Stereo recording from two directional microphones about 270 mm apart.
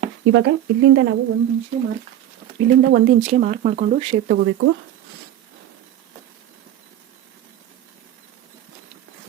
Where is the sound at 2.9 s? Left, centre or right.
Right.